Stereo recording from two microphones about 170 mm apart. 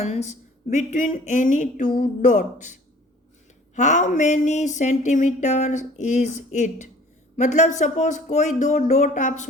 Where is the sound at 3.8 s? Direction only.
45° left (ahead or behind).